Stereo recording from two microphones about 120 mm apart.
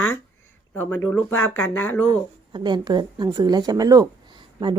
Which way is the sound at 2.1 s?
40° right (ahead or behind).